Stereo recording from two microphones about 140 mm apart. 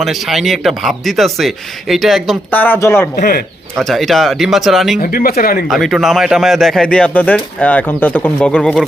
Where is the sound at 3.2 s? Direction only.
90° left.